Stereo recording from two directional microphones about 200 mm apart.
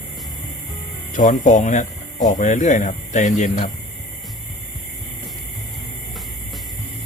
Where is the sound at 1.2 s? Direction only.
40° left (ahead or behind).